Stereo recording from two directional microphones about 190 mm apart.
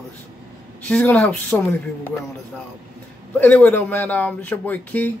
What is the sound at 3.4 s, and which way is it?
Speech, 10° left (ahead or behind).